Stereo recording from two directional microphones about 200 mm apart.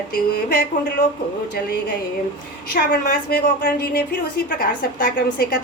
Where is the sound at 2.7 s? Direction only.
50° left (ahead or behind).